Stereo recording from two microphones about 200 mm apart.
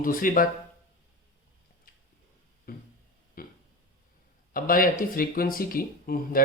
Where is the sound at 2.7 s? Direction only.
50° left (ahead or behind).